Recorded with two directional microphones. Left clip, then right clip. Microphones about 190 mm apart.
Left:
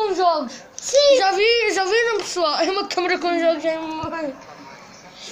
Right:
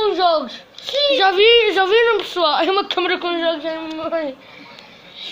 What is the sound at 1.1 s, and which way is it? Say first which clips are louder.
A woman's voice: right 4 dB; 20° right (ahead or behind).